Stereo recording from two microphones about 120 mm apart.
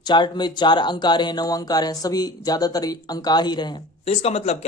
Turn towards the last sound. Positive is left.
turn(degrees=60)  # may be behind; listen again after turning